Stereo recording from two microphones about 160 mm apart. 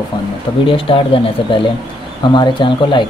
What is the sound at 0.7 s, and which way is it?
Speech, 35° left (ahead or behind).